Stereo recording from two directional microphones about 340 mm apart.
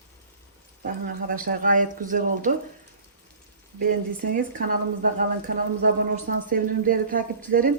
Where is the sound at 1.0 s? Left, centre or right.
Right.